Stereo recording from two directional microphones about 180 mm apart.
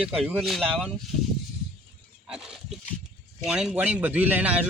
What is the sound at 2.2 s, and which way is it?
Pig, 5° right (ahead or behind).